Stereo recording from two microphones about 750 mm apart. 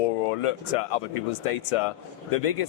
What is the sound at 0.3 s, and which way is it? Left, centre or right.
Speech, left.